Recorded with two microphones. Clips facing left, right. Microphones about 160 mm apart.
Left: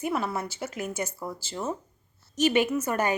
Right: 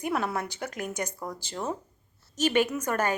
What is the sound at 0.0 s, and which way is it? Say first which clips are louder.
A woman's voice: even; centre (ahead or behind).